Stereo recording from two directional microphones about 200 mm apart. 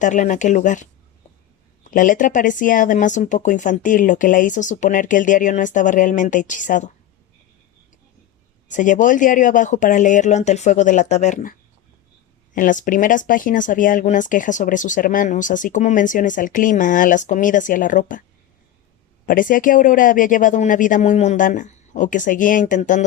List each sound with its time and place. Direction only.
0.0 s speech: 40° left (ahead or behind)
8.7 s speech: 40° left (ahead or behind)
12.5 s speech: 40° left (ahead or behind)
19.2 s speech: 45° left (ahead or behind)